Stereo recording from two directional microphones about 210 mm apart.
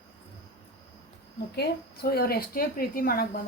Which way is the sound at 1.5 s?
50° left (ahead or behind).